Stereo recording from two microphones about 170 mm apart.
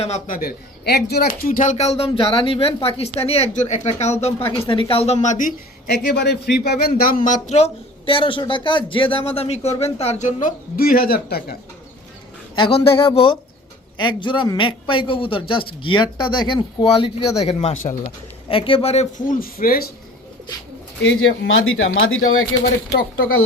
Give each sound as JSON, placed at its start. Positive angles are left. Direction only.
{"t": 0.0, "sound": "speech", "side_deg": 40}
{"t": 0.3, "sound": "speech", "side_deg": 60}
{"t": 4.4, "sound": "speech", "side_deg": 15}
{"t": 4.6, "sound": "a man's voice", "side_deg": 30}
{"t": 7.3, "sound": "speech", "side_deg": 45}
{"t": 12.5, "sound": "speech", "side_deg": 35}
{"t": 21.0, "sound": "speech", "side_deg": 90}